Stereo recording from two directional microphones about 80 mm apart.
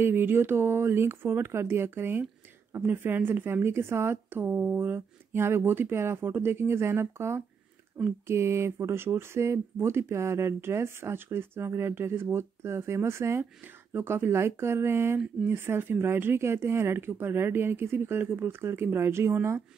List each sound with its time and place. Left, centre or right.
0.0 s a woman's voice: right